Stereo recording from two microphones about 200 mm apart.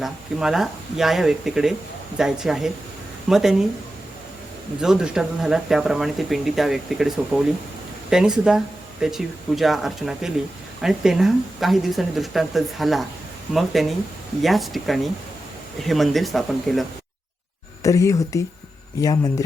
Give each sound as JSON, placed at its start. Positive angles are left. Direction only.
{"t": 0.0, "sound": "speech", "side_deg": 0}
{"t": 4.8, "sound": "speech", "side_deg": -5}
{"t": 17.8, "sound": "speech", "side_deg": 15}